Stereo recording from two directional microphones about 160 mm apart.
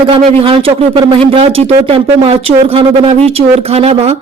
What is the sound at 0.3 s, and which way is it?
Speech, 35° right (ahead or behind).